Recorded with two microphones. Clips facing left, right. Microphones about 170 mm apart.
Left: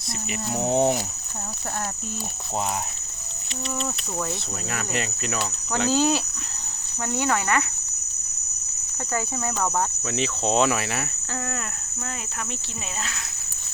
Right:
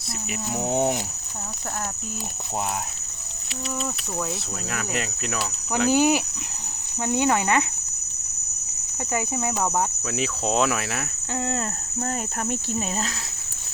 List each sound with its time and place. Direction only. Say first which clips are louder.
0.3 s speech: left 2 dB; centre (ahead or behind)
4.7 s speech: even; centre (ahead or behind)
5.9 s speech: right 2 dB; 15° right (ahead or behind)
9.1 s speech: right 2 dB; 10° right (ahead or behind)